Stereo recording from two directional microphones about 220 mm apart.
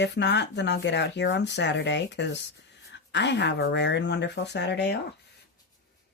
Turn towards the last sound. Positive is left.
turn(degrees=50)  # may be behind; listen again after turning